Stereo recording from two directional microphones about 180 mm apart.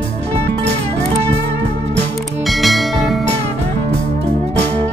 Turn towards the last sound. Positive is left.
turn(degrees=0)  # may be behind; listen again after turning